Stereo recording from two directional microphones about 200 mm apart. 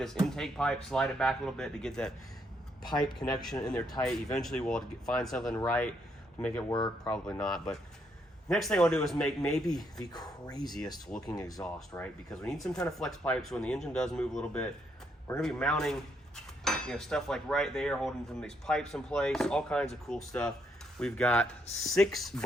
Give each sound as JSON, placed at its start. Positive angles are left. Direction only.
{"t": 0.0, "sound": "speech", "side_deg": 0}
{"t": 3.7, "sound": "speech", "side_deg": 5}
{"t": 6.7, "sound": "speech", "side_deg": 20}
{"t": 7.3, "sound": "speech", "side_deg": 5}
{"t": 10.0, "sound": "speech", "side_deg": 20}
{"t": 11.6, "sound": "speech", "side_deg": 5}